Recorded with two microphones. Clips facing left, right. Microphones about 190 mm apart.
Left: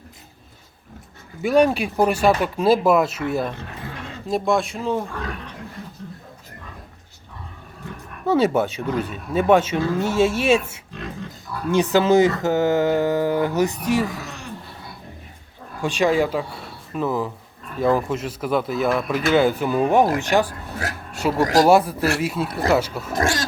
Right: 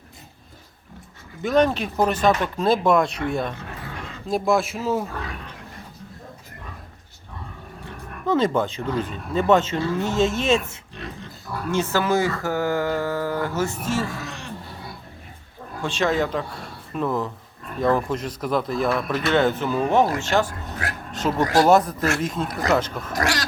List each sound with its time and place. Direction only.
1.4 s speech: 10° left (ahead or behind)
8.3 s speech: 10° left (ahead or behind)
15.8 s speech: 15° left (ahead or behind)
21.1 s a sound: 10° left (ahead or behind)
21.6 s speech: 10° left (ahead or behind)
22.4 s speech: 30° left (ahead or behind)
22.7 s speech: 10° left (ahead or behind)
23.1 s speech: 25° left (ahead or behind)